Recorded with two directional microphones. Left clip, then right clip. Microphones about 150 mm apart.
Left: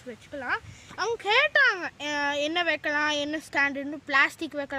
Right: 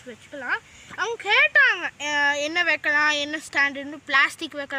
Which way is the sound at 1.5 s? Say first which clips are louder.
Right 4 dB; 45° left (ahead or behind).